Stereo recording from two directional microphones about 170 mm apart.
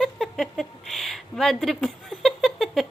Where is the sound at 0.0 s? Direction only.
Centre (ahead or behind).